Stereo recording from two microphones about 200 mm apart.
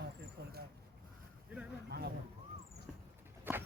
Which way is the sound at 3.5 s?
10° right (ahead or behind).